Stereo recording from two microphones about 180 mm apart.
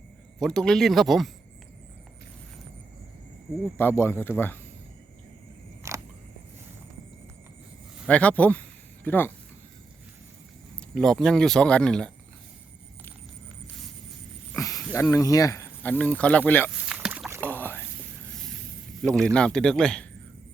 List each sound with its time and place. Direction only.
0.3 s speech: 5° left (ahead or behind)
3.8 s speech: 15° left (ahead or behind)
5.8 s single-lens reflex camera: 15° right (ahead or behind)
8.0 s speech: 5° left (ahead or behind)
10.8 s speech: 5° left (ahead or behind)
14.5 s a sound: 20° left (ahead or behind)
15.1 s speech: 20° left (ahead or behind)
16.8 s rowboat: 5° right (ahead or behind)
17.4 s rowboat: 10° left (ahead or behind)
19.0 s speech: 5° left (ahead or behind)